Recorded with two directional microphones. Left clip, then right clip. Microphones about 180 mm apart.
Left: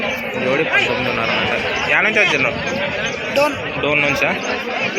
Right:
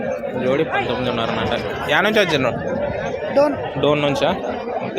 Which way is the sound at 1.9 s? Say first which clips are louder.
Left 1 dB; 40° right (ahead or behind).